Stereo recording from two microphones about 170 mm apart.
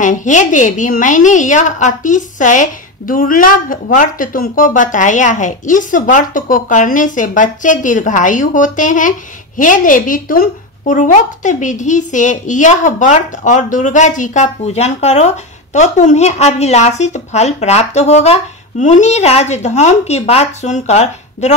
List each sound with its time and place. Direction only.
0.0 s speech: 50° left (ahead or behind)